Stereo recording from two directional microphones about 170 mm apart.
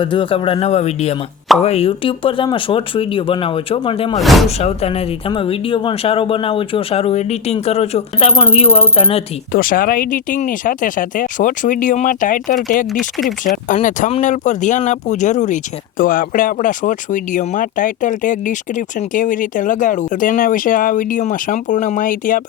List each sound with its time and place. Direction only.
0.0 s speech: 30° left (ahead or behind)
4.2 s speech: centre (ahead or behind)
4.4 s speech: 40° left (ahead or behind)
9.5 s speech: 55° left (ahead or behind)
12.9 s speech: centre (ahead or behind)
14.1 s speech: 45° left (ahead or behind)